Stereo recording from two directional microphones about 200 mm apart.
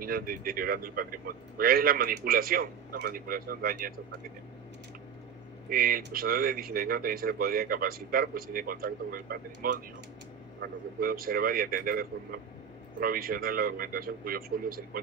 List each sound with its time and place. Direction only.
0.0 s a man's voice: 45° right (ahead or behind)
5.7 s a man's voice: 45° right (ahead or behind)